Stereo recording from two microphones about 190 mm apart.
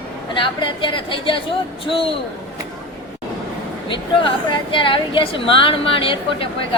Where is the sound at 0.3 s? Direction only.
25° left (ahead or behind).